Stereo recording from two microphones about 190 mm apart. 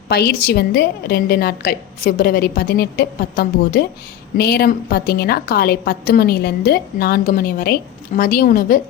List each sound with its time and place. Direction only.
0.1 s a woman's voice: 55° left (ahead or behind)